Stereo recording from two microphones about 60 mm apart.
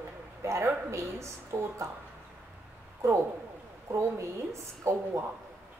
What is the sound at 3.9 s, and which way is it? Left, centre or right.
A woman's voice, right.